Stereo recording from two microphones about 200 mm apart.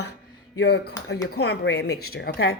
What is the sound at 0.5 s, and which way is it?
A woman's voice, 55° left (ahead or behind).